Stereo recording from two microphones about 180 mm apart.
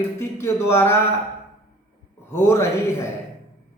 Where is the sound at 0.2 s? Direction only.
15° left (ahead or behind).